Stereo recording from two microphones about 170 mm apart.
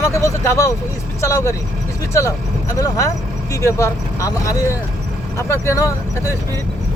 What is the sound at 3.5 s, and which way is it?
Speech, 15° left (ahead or behind).